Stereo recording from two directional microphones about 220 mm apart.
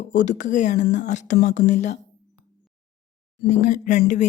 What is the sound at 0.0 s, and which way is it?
A woman's voice, 35° left (ahead or behind).